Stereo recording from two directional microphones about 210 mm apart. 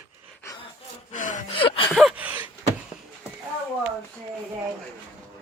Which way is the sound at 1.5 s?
25° left (ahead or behind).